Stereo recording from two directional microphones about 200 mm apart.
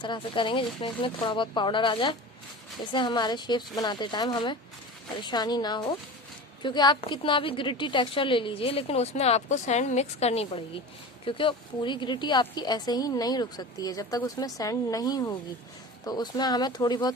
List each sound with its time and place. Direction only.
0.0 s a woman's voice: 25° left (ahead or behind)